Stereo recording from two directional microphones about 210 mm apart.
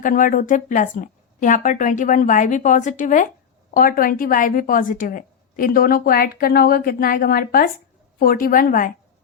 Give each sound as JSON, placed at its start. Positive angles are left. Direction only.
{"t": 0.0, "sound": "a woman's voice", "side_deg": 40}